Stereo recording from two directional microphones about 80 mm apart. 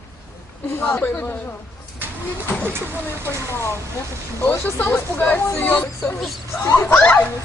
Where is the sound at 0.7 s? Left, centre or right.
Left.